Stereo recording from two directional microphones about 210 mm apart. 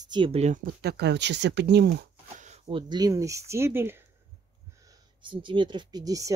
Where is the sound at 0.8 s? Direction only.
50° right (ahead or behind).